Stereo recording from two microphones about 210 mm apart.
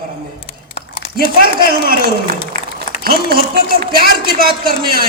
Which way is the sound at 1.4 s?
45° right (ahead or behind).